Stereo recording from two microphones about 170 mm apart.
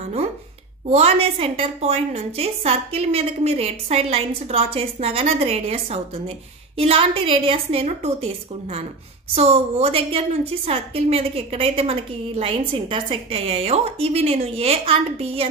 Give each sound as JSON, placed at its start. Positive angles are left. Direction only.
{"t": 0.8, "sound": "a woman's voice", "side_deg": -35}